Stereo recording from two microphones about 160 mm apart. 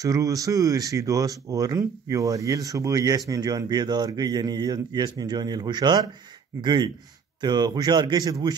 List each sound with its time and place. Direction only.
0.0 s speech: 20° right (ahead or behind)